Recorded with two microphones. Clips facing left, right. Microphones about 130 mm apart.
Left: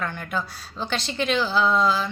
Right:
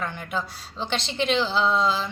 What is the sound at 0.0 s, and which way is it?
A woman's voice, 20° right (ahead or behind).